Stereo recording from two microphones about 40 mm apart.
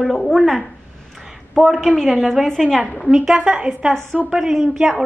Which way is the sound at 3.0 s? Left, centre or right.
Centre.